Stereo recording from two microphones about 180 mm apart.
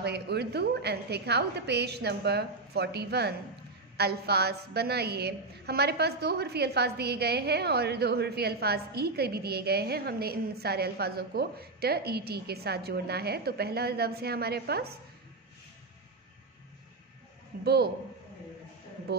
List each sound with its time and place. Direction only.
0.0 s a woman's voice: 65° right (ahead or behind)
17.6 s a woman's voice: 60° right (ahead or behind)